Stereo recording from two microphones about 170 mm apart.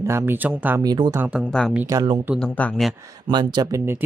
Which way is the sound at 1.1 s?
5° right (ahead or behind).